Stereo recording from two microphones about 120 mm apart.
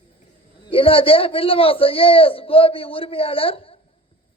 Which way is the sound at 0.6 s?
50° left (ahead or behind).